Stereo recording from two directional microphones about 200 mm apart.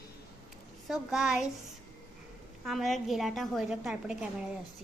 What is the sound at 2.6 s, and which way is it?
A woman's voice, centre (ahead or behind).